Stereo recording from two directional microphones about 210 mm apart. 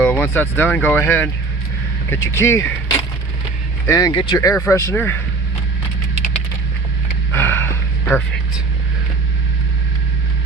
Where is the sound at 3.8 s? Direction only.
15° left (ahead or behind).